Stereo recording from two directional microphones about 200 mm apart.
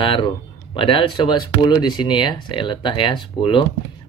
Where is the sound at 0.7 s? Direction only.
25° left (ahead or behind).